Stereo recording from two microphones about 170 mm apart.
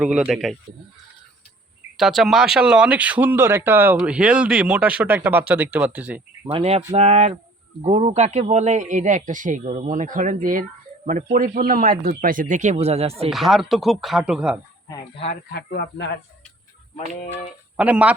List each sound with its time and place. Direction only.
0.0 s speech: 5° right (ahead or behind)
2.0 s speech: centre (ahead or behind)
6.5 s speech: 35° right (ahead or behind)
13.3 s speech: centre (ahead or behind)
14.8 s speech: 20° left (ahead or behind)
15.4 s speech: 70° left (ahead or behind)
17.7 s speech: 10° right (ahead or behind)